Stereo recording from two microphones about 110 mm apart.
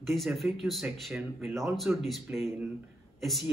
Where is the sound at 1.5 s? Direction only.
25° right (ahead or behind).